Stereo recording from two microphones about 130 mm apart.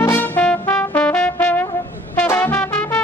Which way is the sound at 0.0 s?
15° left (ahead or behind).